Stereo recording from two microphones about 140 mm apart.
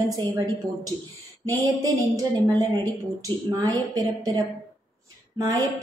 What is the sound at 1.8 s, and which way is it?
Speech, 25° right (ahead or behind).